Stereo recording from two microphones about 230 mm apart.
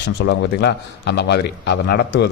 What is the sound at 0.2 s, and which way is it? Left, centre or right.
A man's voice, left.